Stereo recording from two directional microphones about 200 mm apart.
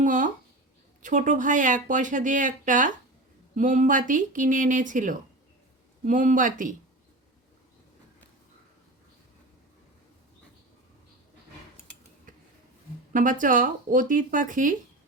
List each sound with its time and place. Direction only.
0.0 s speech: 40° right (ahead or behind)
13.4 s speech: 40° right (ahead or behind)